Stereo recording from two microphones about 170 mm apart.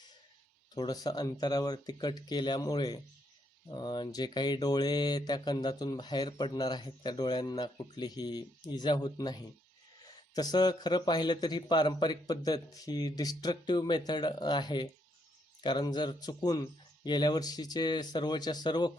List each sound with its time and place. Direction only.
0.7 s a man's voice: 20° left (ahead or behind)